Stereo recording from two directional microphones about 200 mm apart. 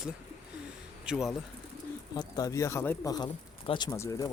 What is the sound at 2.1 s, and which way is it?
Speech, 20° left (ahead or behind).